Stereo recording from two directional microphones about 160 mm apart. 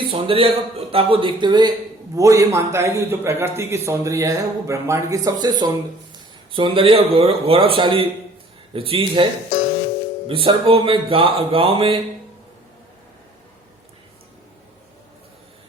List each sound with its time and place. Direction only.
0.0 s a man's voice: 35° right (ahead or behind)